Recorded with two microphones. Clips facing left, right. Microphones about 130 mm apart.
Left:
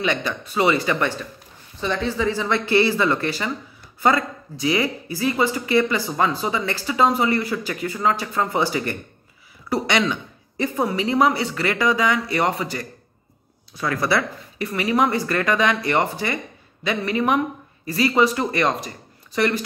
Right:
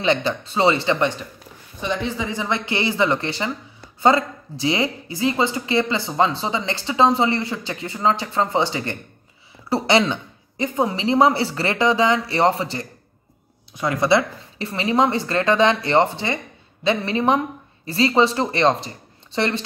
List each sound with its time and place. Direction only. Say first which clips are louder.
0.0 s speech: right 3 dB; 30° right (ahead or behind)